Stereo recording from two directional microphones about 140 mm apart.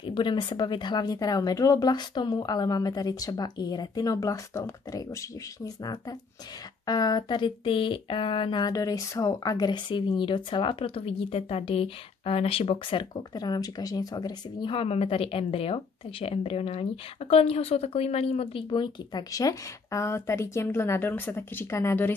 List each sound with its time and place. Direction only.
0.0 s speech: 35° left (ahead or behind)
6.9 s speech: 30° left (ahead or behind)